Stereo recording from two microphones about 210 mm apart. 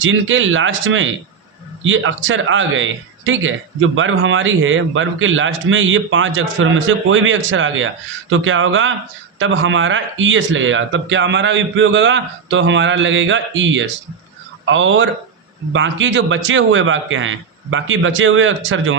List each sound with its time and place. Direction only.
0.0 s a man's voice: 65° right (ahead or behind)